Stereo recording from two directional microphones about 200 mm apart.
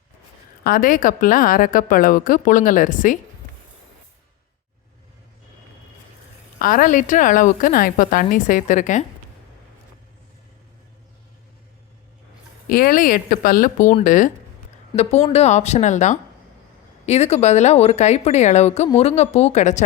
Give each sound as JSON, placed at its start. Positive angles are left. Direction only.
{"t": 0.6, "sound": "a woman's voice", "side_deg": 45}
{"t": 6.6, "sound": "a woman's voice", "side_deg": 45}
{"t": 12.6, "sound": "a woman's voice", "side_deg": 45}
{"t": 15.3, "sound": "a woman's voice", "side_deg": 35}